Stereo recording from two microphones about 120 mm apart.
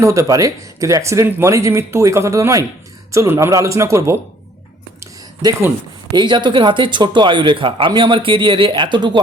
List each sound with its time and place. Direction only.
0.0 s speech: 25° right (ahead or behind)
4.9 s a sound: 30° right (ahead or behind)
6.1 s speech: 40° right (ahead or behind)